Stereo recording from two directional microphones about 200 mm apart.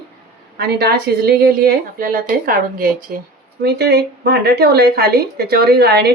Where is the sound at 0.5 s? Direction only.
55° right (ahead or behind).